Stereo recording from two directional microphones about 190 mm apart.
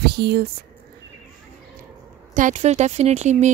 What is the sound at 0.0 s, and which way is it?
Speech, 60° right (ahead or behind).